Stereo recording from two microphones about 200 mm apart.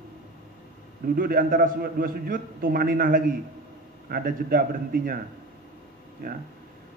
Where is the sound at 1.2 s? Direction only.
45° right (ahead or behind).